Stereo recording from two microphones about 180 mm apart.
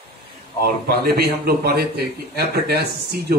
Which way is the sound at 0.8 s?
60° right (ahead or behind).